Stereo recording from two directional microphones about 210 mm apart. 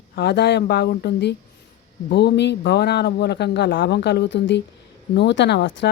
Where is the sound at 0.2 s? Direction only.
50° left (ahead or behind).